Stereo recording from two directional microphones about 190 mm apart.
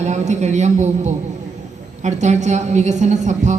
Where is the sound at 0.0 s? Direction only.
35° right (ahead or behind).